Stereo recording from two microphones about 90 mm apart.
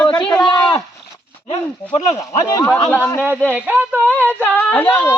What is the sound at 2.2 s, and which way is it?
Speech, 40° left (ahead or behind).